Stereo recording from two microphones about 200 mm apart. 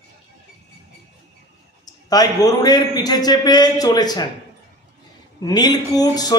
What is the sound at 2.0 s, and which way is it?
A man's voice, 20° left (ahead or behind).